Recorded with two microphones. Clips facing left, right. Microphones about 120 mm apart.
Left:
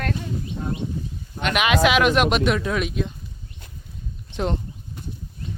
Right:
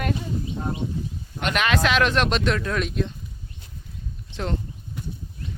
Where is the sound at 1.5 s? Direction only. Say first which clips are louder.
Left 3 dB; 10° left (ahead or behind).